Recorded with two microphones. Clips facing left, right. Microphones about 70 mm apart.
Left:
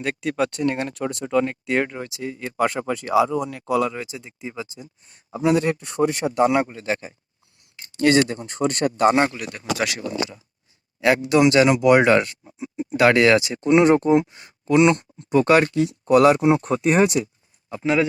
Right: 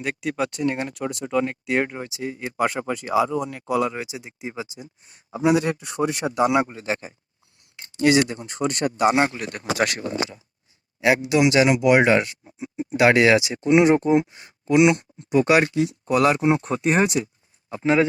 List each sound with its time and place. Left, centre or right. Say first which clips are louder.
0.0 s speech: left 2 dB; centre; by 2.4 s right
2.4 s speech: left 2 dB; centre
3.8 s speech: even; centre
5.8 s speech: left 3 dB; right
6.5 s speech: even; right; by 9.0 s centre
9.0 s speech: left 1 dB; left
9.3 s speech: even; right
11.0 s speech: left 2 dB; centre
15.9 s speech: left 5 dB; centre
16.8 s a man's voice: left 2 dB; right